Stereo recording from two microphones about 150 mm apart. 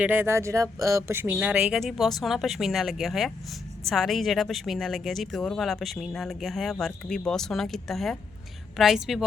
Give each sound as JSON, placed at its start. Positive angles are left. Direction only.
{"t": 0.0, "sound": "a woman's voice", "side_deg": -15}